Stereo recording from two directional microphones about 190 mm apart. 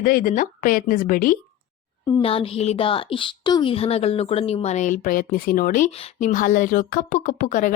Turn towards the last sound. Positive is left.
turn(degrees=45)  # may be behind; listen again after turning